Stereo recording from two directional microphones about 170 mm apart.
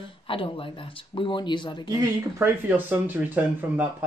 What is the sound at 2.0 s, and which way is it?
Speech, 10° right (ahead or behind).